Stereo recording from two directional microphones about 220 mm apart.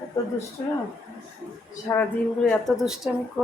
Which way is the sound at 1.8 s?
10° left (ahead or behind).